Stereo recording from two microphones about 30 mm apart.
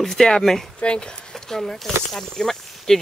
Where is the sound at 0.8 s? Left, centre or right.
Left.